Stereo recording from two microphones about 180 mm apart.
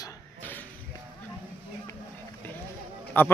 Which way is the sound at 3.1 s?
10° left (ahead or behind).